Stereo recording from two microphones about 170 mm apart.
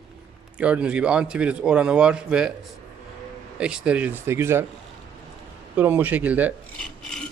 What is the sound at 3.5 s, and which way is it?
Speech, 5° right (ahead or behind).